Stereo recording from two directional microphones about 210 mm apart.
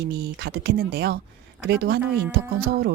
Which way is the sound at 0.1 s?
50° right (ahead or behind).